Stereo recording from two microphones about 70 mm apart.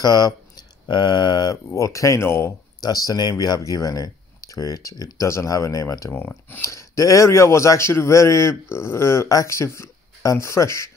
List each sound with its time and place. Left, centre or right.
0.0 s speech: left
1.8 s a man's voice: left
2.2 s speech: left
2.8 s speech: left
6.1 s speech: left
6.6 s a man's voice: left